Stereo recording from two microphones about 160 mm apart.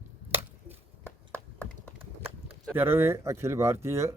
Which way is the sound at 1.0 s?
10° left (ahead or behind).